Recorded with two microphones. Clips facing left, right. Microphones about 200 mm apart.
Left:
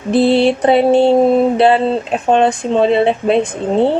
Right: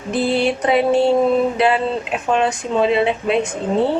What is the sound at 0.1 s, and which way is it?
Speech, 30° left (ahead or behind).